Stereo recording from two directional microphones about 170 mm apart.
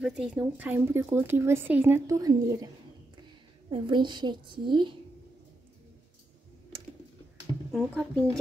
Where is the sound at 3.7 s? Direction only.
30° right (ahead or behind).